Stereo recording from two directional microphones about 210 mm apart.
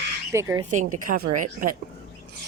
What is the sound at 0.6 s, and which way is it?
A woman's voice, 35° right (ahead or behind).